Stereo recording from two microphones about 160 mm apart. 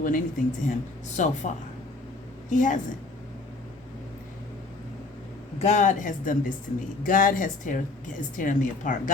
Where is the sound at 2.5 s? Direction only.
50° left (ahead or behind).